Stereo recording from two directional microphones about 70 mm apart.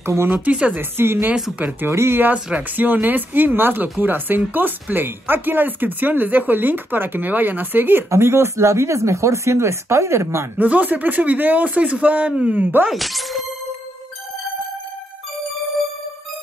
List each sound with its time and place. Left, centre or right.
0.0 s speech: right
0.3 s speech: centre
0.7 s speech: right
1.6 s speech: right
1.9 s speech: right
2.3 s speech: right
10.6 s speech: right
12.9 s speech: centre